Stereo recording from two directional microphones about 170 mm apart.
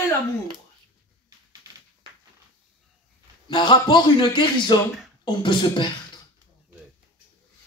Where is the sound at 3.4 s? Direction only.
25° left (ahead or behind).